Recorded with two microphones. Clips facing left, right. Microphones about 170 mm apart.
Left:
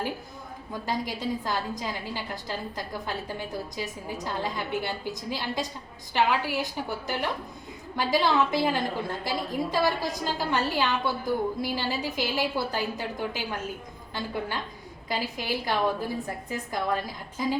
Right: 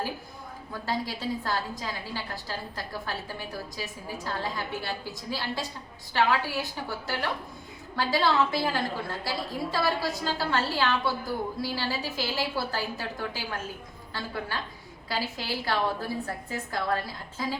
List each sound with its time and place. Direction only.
0.7 s a woman's voice: 15° left (ahead or behind)
7.9 s a woman's voice: 15° left (ahead or behind)